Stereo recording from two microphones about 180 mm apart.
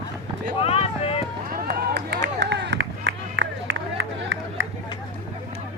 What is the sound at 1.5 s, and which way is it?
Run, 60° right (ahead or behind).